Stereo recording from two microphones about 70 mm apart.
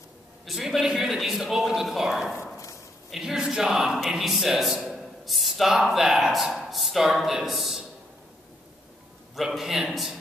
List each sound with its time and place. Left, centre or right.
0.5 s a man's voice: centre
9.3 s a man's voice: centre